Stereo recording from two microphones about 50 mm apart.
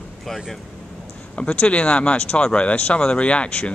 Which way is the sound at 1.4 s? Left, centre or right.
Left.